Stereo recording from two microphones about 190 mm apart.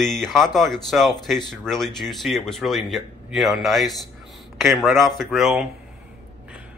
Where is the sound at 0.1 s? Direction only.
Centre (ahead or behind).